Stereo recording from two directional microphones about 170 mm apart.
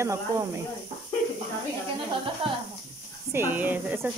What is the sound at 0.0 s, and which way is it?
Speech, 15° right (ahead or behind).